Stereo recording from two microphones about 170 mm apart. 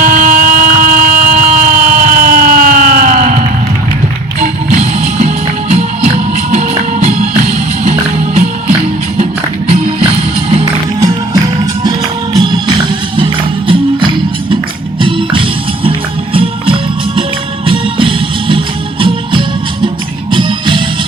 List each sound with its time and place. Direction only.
0.0 s a sound: 50° right (ahead or behind)
4.4 s music: 45° right (ahead or behind)
12.4 s music: 25° right (ahead or behind)